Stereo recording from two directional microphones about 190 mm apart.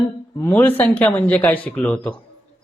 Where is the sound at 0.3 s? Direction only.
10° left (ahead or behind).